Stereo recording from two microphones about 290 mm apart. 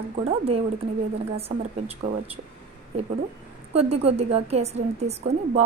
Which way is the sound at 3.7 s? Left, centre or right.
Right.